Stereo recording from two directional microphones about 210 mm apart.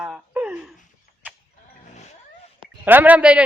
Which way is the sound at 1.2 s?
10° right (ahead or behind).